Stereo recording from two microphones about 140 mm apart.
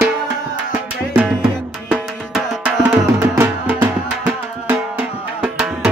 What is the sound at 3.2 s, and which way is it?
Music, 20° right (ahead or behind).